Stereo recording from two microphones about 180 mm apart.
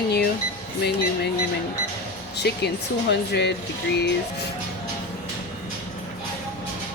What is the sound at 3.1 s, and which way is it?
Speech, 70° left (ahead or behind).